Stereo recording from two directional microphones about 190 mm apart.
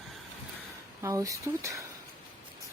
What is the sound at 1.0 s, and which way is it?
Speech, 15° right (ahead or behind).